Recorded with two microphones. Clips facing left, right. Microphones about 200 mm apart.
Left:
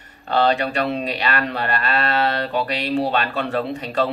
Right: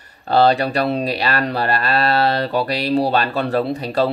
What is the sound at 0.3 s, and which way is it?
Speech, 35° right (ahead or behind).